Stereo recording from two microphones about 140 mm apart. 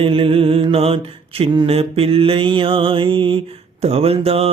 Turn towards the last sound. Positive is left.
turn(degrees=-45)  # may be behind; listen again after turning